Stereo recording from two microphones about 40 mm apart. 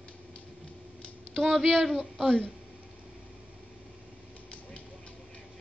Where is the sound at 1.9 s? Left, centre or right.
Centre.